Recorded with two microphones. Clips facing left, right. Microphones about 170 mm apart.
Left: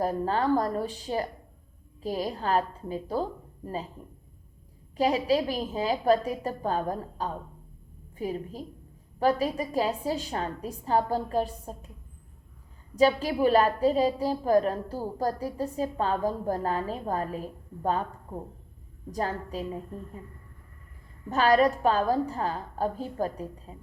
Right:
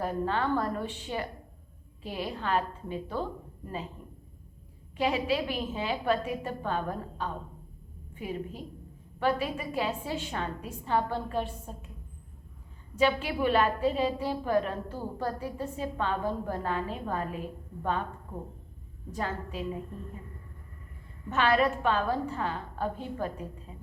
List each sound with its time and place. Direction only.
0.0 s a woman's voice: 40° left (ahead or behind)
4.9 s a woman's voice: 40° left (ahead or behind)
13.0 s a woman's voice: 40° left (ahead or behind)
21.2 s a woman's voice: 40° left (ahead or behind)